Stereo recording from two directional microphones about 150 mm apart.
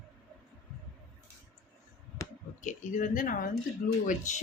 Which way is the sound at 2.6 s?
55° left (ahead or behind).